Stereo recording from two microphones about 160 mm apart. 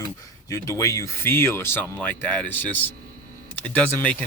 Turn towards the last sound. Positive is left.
turn(degrees=10)  # may be behind; listen again after turning